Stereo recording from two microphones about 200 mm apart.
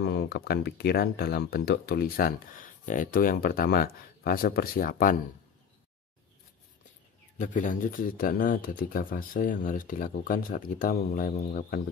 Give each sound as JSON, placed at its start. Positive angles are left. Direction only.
{"t": 0.0, "sound": "speech", "side_deg": 55}
{"t": 7.3, "sound": "speech", "side_deg": 40}